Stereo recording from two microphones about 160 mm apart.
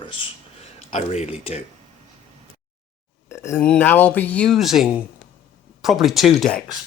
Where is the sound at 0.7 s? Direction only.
40° left (ahead or behind).